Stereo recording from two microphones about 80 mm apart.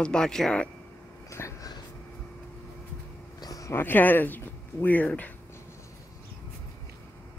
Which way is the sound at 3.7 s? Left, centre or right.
Left.